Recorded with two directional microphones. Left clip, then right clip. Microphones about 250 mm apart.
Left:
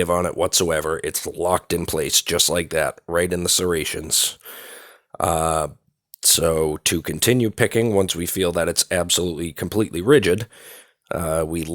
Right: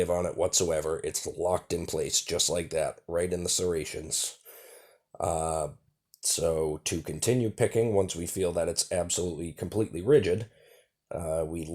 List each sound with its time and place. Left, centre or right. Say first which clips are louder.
0.0 s speech: left 7 dB; left